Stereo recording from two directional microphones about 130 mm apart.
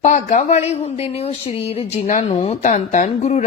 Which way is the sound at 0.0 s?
70° left (ahead or behind).